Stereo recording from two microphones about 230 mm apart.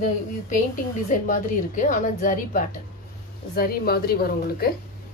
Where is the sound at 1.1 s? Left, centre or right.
Left.